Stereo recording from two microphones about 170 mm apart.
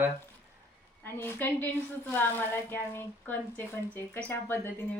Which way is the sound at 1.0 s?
15° left (ahead or behind).